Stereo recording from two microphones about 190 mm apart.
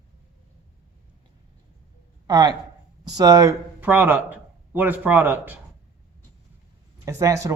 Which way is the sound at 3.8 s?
10° right (ahead or behind).